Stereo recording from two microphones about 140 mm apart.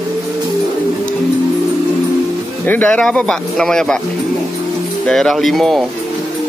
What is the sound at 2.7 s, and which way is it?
Speech, 10° left (ahead or behind).